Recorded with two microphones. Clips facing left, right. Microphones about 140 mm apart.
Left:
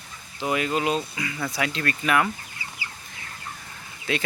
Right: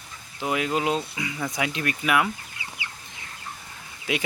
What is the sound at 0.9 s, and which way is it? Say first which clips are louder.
Speech: even; 20° right (ahead or behind).